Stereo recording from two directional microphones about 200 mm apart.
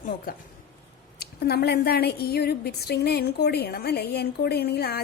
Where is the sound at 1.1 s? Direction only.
55° left (ahead or behind).